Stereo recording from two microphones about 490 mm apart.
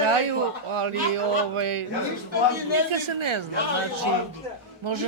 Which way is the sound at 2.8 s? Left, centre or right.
Right.